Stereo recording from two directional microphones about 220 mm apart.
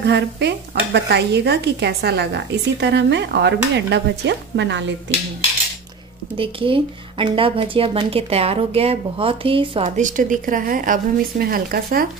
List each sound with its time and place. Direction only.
0.0 s speech: 50° right (ahead or behind)
6.3 s speech: 25° right (ahead or behind)
9.8 s a woman's voice: 35° right (ahead or behind)